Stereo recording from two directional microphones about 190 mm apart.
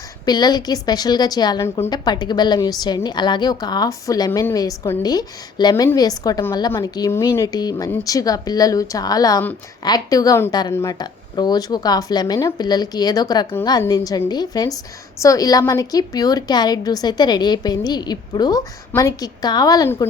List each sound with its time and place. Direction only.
0.3 s a woman's voice: 20° left (ahead or behind)